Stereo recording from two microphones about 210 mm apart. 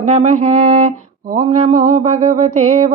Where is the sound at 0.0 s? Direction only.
35° right (ahead or behind).